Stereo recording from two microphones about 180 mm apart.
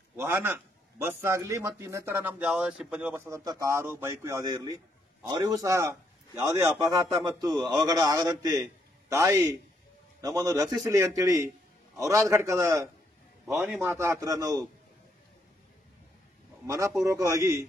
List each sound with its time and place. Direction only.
0.1 s a man's voice: 10° right (ahead or behind)
16.6 s speech: 15° right (ahead or behind)